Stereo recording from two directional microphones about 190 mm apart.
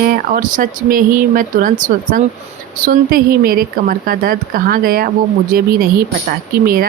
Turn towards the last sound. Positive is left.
turn(degrees=-50)  # may be behind; listen again after turning